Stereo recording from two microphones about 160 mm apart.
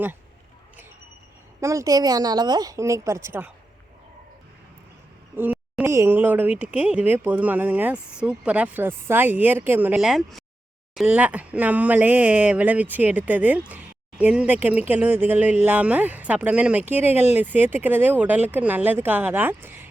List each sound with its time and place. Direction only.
1.6 s a woman's voice: 20° right (ahead or behind)
5.4 s speech: 10° right (ahead or behind)